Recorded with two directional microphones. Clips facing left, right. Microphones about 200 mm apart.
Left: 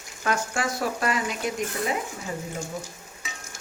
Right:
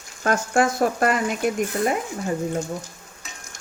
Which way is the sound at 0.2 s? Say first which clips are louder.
Right 7 dB; 50° right (ahead or behind).